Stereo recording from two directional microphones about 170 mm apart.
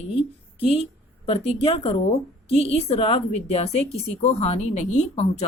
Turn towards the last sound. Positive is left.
turn(degrees=40)  # may be behind; listen again after turning